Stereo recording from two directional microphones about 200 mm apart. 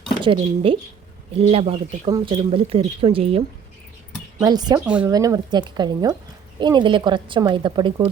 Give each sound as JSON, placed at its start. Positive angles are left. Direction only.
{"t": 0.2, "sound": "speech", "side_deg": -25}